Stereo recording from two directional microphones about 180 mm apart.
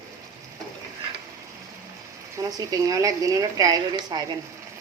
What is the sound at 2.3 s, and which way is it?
A woman's voice, 20° right (ahead or behind).